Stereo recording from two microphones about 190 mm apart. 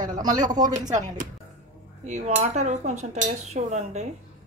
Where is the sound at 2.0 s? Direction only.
40° right (ahead or behind).